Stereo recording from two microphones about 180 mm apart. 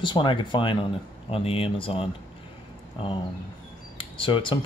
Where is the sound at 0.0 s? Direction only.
25° left (ahead or behind).